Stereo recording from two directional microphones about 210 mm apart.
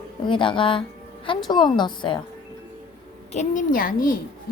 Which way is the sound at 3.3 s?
35° left (ahead or behind).